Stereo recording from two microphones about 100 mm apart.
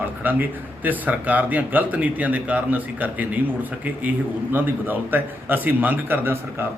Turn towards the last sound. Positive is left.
turn(degrees=-20)  # may be behind; listen again after turning